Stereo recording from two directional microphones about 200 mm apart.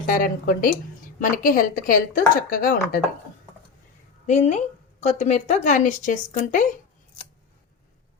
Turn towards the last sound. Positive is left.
turn(degrees=40)  # may be behind; listen again after turning